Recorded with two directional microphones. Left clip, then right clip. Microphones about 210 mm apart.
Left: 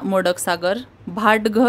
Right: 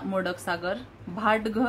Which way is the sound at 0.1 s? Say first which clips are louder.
Left 10 dB; 55° left (ahead or behind).